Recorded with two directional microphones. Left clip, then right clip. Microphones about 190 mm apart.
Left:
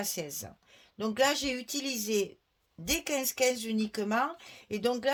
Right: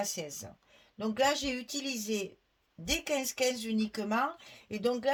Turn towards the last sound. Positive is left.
turn(degrees=45)  # may be behind; listen again after turning